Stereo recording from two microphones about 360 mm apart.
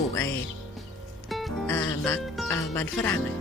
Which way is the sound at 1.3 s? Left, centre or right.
Centre.